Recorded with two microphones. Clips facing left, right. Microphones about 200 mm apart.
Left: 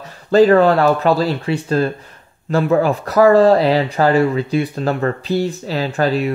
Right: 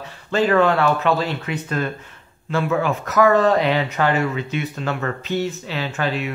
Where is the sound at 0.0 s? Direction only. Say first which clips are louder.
Left 9 dB; 40° left (ahead or behind).